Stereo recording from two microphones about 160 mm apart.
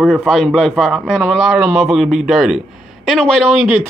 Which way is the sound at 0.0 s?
5° left (ahead or behind).